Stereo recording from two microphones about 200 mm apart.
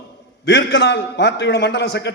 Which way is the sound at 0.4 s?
55° left (ahead or behind).